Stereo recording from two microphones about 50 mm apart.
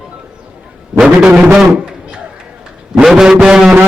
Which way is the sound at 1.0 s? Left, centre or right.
Centre.